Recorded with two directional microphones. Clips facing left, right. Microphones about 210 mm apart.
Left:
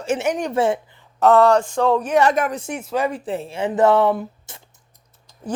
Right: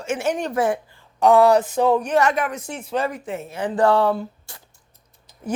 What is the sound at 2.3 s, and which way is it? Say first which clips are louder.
Speech: left 3 dB; 45° left (ahead or behind).